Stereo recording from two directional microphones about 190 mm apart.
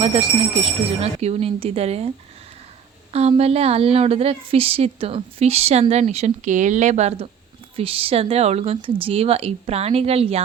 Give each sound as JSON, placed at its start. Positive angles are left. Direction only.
{"t": 0.0, "sound": "a woman's voice", "side_deg": -30}
{"t": 3.1, "sound": "a woman's voice", "side_deg": -35}